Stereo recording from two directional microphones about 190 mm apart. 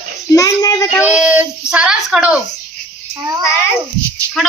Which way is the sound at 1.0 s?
5° right (ahead or behind).